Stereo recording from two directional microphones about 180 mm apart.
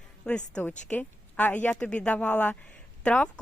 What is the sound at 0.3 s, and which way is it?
A woman's voice, 5° left (ahead or behind).